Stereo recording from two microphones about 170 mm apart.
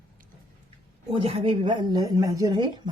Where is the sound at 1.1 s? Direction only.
30° right (ahead or behind).